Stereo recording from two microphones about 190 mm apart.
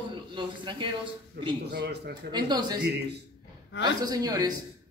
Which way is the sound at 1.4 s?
60° right (ahead or behind).